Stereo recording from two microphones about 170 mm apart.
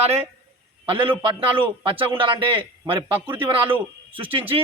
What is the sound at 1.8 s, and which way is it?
Speech, 30° right (ahead or behind).